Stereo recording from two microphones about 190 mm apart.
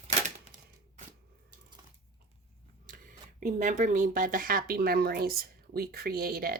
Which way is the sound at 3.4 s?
40° right (ahead or behind).